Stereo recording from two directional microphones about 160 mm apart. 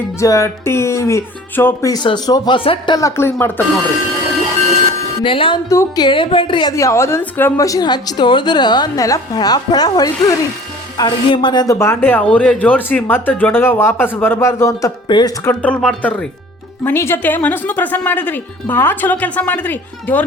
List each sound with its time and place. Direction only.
0.2 s a woman's voice: 20° left (ahead or behind)
3.2 s speech: 15° left (ahead or behind)
5.2 s speech: 30° left (ahead or behind)
5.6 s a woman's voice: 20° left (ahead or behind)
15.4 s speech: 10° left (ahead or behind)